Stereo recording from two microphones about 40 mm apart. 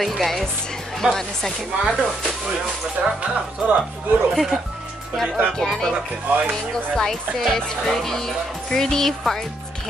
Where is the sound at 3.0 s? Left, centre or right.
Right.